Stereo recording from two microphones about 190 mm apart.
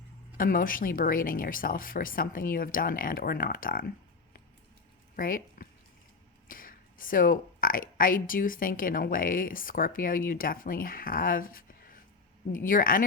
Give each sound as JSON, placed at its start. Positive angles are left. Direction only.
{"t": 0.3, "sound": "speech", "side_deg": 45}
{"t": 5.1, "sound": "speech", "side_deg": 50}